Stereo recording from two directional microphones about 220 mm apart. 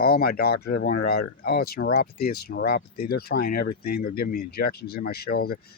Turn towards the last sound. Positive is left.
turn(degrees=45)  # may be behind; listen again after turning